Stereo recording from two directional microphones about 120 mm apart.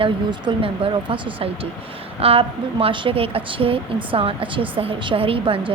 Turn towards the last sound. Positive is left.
turn(degrees=-50)  # may be behind; listen again after turning